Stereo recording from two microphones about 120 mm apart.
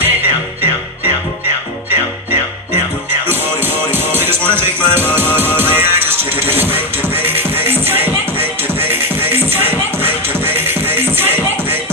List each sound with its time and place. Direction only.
3.3 s music: 20° right (ahead or behind)